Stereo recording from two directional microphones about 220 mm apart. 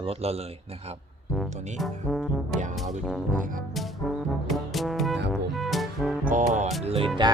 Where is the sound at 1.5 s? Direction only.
30° right (ahead or behind).